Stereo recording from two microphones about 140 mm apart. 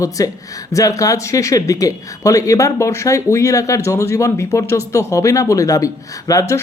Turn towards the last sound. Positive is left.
turn(degrees=20)  # may be behind; listen again after turning